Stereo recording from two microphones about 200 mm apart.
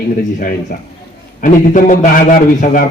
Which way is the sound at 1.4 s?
40° left (ahead or behind).